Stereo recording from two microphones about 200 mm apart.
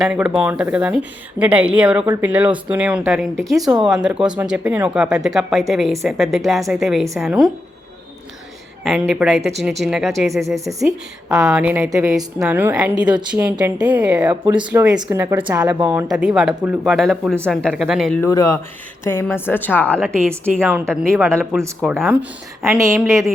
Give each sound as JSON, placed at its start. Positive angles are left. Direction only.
{"t": 0.0, "sound": "speech", "side_deg": -5}
{"t": 8.8, "sound": "speech", "side_deg": 0}
{"t": 10.4, "sound": "speech", "side_deg": -15}
{"t": 11.3, "sound": "speech", "side_deg": -5}
{"t": 18.2, "sound": "a woman's voice", "side_deg": 15}
{"t": 20.6, "sound": "speech", "side_deg": -5}
{"t": 21.8, "sound": "speech", "side_deg": 0}